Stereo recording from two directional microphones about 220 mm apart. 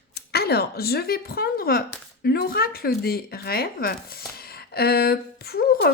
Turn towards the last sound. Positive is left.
turn(degrees=45)  # may be behind; listen again after turning